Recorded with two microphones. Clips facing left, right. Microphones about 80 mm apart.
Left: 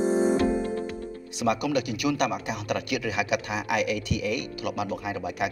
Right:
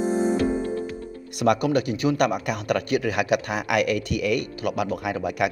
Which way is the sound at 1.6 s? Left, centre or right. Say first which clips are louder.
Right 4 dB; right.